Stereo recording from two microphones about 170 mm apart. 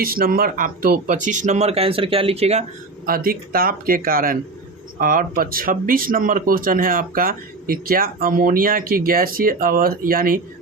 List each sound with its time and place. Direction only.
0.0 s speech: 60° right (ahead or behind); by 2.6 s 40° right (ahead or behind)
3.1 s speech: 60° right (ahead or behind)